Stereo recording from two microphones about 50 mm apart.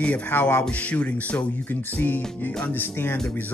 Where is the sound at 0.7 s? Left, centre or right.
Left.